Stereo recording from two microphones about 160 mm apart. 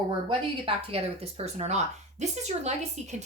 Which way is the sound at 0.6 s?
40° right (ahead or behind).